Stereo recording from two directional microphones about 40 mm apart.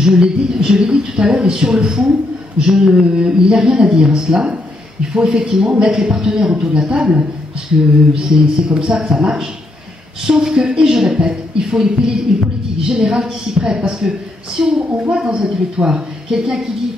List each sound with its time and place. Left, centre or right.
0.0 s a woman's voice: right
2.6 s mantra: centre
3.0 s a woman's voice: right
10.2 s a woman's voice: centre
14.6 s mantra: centre
15.0 s a woman's voice: right